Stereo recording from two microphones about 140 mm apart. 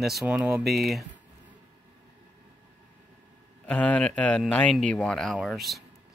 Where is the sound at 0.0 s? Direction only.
5° right (ahead or behind).